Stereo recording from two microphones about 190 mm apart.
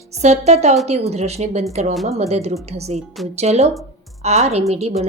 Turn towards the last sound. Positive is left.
turn(degrees=-35)  # may be behind; listen again after turning